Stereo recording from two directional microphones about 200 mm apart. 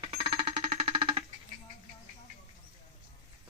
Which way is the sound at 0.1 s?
30° right (ahead or behind).